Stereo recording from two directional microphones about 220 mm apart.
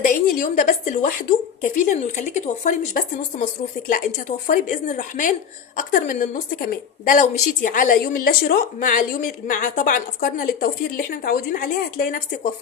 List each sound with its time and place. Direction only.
0.0 s a woman's voice: 35° left (ahead or behind)